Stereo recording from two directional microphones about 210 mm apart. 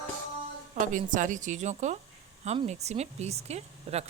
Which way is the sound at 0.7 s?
35° right (ahead or behind).